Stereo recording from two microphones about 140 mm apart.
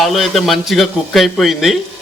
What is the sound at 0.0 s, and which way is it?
Speech, centre (ahead or behind).